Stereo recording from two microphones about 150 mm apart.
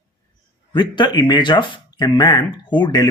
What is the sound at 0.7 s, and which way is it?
Speech, 30° left (ahead or behind).